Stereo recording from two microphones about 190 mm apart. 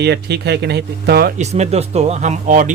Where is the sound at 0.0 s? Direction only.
60° right (ahead or behind).